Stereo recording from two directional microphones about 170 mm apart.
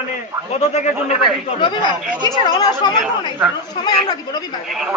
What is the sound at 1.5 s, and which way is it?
Speech, 25° left (ahead or behind).